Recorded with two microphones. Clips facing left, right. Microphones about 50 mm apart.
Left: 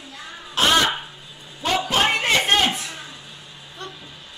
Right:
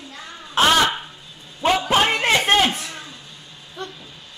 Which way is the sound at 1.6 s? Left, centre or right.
Right.